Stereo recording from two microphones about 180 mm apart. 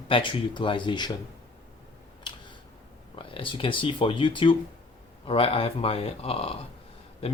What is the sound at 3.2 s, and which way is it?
Speech, 30° left (ahead or behind).